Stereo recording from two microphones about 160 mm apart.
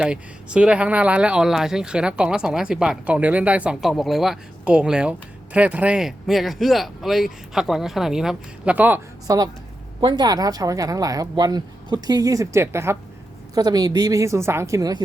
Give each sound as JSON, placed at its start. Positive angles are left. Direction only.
{"t": 0.0, "sound": "speech", "side_deg": -5}
{"t": 9.2, "sound": "speech", "side_deg": -20}